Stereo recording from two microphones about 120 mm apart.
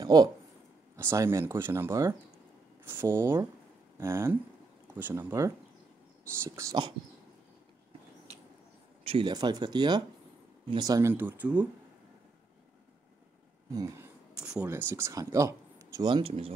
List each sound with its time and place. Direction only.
0.0 s speech: 35° right (ahead or behind)
0.9 s speech: 25° right (ahead or behind)
9.0 s speech: 45° right (ahead or behind)
11.0 s speech: 20° right (ahead or behind)
13.7 s speech: 20° right (ahead or behind)
14.4 s speech: 5° right (ahead or behind)
14.7 s speech: 20° right (ahead or behind)
16.0 s speech: 45° right (ahead or behind)